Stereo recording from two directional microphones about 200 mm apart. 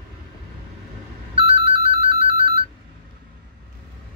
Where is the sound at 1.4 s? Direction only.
30° right (ahead or behind).